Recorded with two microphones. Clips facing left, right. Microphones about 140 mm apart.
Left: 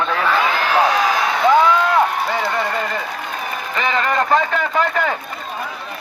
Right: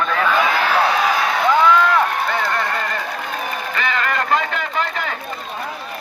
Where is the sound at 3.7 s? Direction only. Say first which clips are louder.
Left 4 dB; 30° left (ahead or behind); by 5.0 s 45° left (ahead or behind).